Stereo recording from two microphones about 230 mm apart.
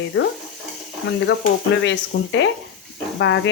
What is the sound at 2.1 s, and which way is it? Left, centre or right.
Speech, left.